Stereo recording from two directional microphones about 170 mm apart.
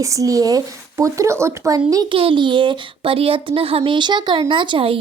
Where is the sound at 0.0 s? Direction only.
20° right (ahead or behind).